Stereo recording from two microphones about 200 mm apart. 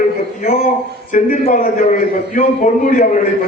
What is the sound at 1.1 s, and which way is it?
A man's voice, 40° left (ahead or behind).